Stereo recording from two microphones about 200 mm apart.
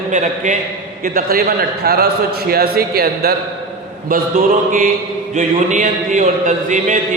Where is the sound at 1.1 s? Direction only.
50° right (ahead or behind).